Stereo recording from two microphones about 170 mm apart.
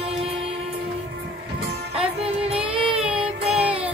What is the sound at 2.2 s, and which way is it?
Music, 35° right (ahead or behind).